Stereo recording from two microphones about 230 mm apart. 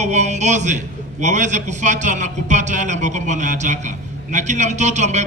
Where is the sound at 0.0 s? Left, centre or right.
Right.